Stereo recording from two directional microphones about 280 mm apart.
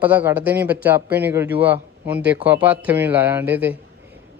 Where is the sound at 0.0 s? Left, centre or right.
Centre.